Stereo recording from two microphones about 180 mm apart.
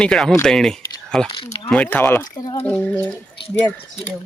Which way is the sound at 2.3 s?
25° left (ahead or behind).